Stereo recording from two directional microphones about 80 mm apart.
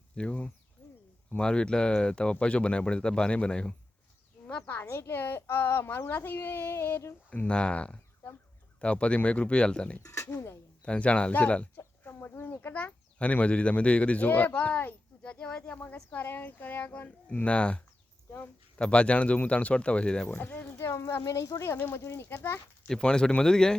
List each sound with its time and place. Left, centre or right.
0.2 s speech: centre
0.8 s a sound: centre
1.4 s speech: centre; by 7.1 s left
7.3 s speech: centre
10.0 s speech: left
10.8 s speech: centre
18.3 s speech: left
18.8 s speech: centre
20.4 s speech: left
22.9 s speech: centre